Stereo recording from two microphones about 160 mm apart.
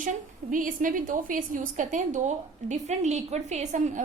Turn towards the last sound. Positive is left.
turn(degrees=-50)  # may be behind; listen again after turning